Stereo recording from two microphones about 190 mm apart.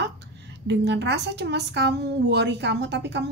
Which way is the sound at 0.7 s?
65° right (ahead or behind).